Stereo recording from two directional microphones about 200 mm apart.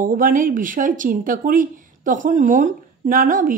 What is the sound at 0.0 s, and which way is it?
Speech, 45° right (ahead or behind).